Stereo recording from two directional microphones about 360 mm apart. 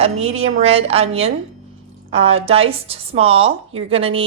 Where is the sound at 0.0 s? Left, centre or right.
Centre.